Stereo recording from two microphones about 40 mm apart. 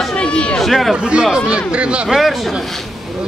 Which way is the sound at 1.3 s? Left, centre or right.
Right.